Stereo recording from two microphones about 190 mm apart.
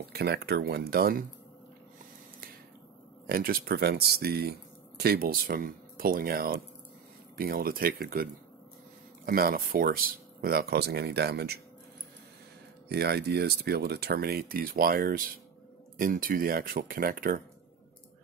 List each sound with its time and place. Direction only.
0.1 s speech: 60° right (ahead or behind)
3.3 s speech: 50° right (ahead or behind)
12.8 s speech: 60° right (ahead or behind)